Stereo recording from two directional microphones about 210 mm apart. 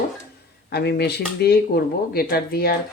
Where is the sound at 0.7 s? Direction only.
50° left (ahead or behind).